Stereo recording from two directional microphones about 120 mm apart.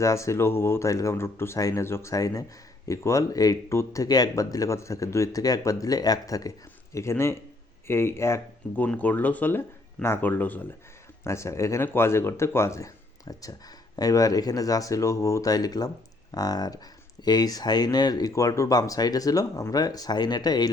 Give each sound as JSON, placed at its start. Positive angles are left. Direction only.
{"t": 0.0, "sound": "speech", "side_deg": 25}